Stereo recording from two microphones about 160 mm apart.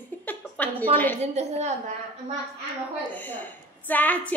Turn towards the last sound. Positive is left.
turn(degrees=10)  # may be behind; listen again after turning